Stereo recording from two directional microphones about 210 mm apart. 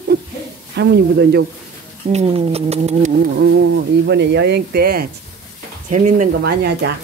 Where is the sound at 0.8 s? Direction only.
50° right (ahead or behind).